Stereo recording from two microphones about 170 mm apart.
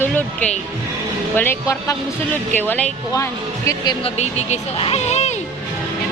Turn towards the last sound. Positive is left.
turn(degrees=40)  # may be behind; listen again after turning